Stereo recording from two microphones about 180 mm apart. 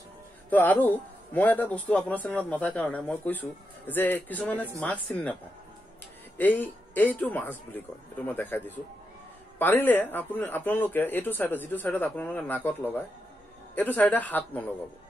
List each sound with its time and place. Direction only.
0.5 s speech: 10° left (ahead or behind)
6.3 s speech: 10° left (ahead or behind)